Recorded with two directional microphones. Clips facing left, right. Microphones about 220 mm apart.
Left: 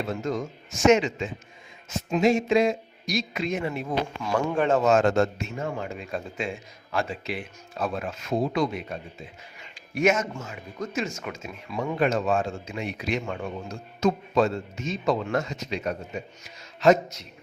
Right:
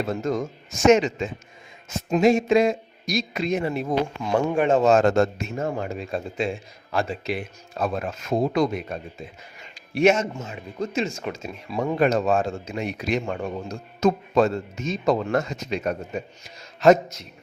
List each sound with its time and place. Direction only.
0.9 s speech: 40° right (ahead or behind)
4.2 s a man's voice: 20° right (ahead or behind)
4.8 s speech: 35° right (ahead or behind)
9.9 s speech: 30° right (ahead or behind); by 17.2 s 50° right (ahead or behind)